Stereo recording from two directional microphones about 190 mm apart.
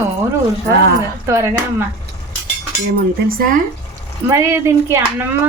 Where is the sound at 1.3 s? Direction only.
15° right (ahead or behind).